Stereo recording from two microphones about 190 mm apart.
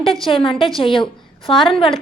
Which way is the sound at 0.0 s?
Centre (ahead or behind).